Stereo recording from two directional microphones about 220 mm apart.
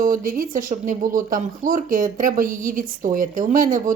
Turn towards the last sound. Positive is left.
turn(degrees=-40)  # may be behind; listen again after turning